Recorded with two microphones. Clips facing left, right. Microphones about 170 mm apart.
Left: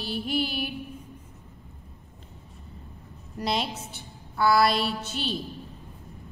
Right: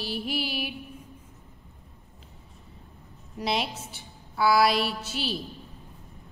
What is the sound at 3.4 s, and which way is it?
A woman's voice, centre (ahead or behind).